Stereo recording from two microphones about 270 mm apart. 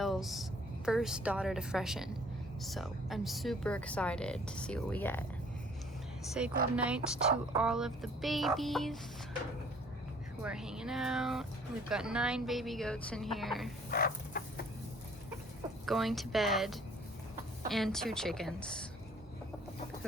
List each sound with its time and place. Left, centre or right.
0.0 s a sound: centre
0.9 s speech: centre
6.4 s speech: centre
10.4 s speech: centre
13.9 s a sound: left
15.9 s speech: centre